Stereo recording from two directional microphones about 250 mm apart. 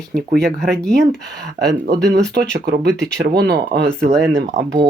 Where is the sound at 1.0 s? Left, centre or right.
Right.